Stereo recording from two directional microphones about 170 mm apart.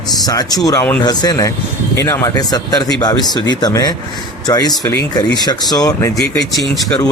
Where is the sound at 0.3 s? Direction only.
20° left (ahead or behind).